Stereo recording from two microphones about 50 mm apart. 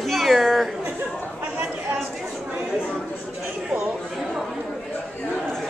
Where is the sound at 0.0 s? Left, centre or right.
Centre.